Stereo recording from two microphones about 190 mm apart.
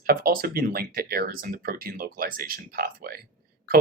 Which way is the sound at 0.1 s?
50° right (ahead or behind).